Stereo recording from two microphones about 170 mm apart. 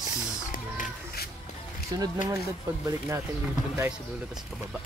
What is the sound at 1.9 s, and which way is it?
Speech, 20° right (ahead or behind).